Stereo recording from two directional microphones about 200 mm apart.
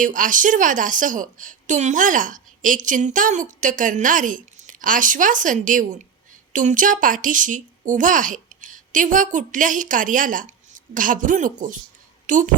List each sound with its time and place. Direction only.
0.0 s a woman's voice: 40° right (ahead or behind)